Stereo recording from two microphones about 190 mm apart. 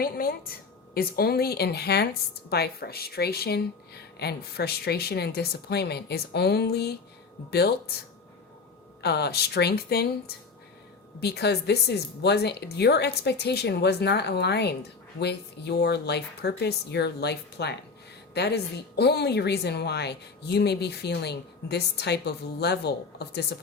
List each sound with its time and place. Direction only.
0.0 s a woman's voice: 50° left (ahead or behind)
9.0 s a woman's voice: 60° left (ahead or behind)